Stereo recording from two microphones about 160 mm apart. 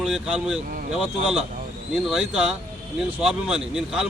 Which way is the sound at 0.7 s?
60° right (ahead or behind).